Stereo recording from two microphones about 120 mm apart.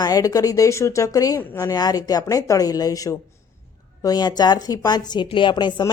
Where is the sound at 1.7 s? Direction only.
30° left (ahead or behind).